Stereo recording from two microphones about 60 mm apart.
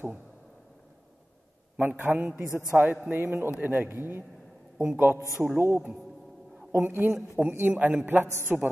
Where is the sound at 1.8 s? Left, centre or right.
Right.